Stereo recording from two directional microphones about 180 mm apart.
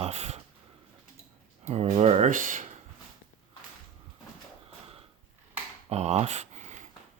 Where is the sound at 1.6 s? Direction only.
35° right (ahead or behind).